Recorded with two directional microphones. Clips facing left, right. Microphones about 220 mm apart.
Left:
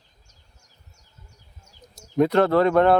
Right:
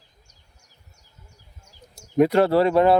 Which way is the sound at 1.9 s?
10° right (ahead or behind).